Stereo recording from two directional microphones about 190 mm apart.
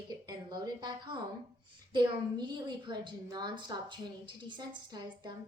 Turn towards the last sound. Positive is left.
turn(degrees=-25)  # may be behind; listen again after turning